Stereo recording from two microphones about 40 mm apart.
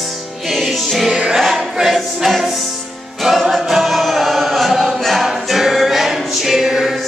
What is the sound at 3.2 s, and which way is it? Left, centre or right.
Choir, centre.